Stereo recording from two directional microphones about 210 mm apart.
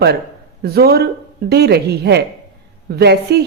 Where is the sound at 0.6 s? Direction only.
50° right (ahead or behind).